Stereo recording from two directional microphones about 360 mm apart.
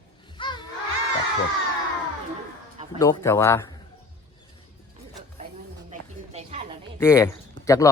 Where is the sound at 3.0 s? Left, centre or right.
Centre.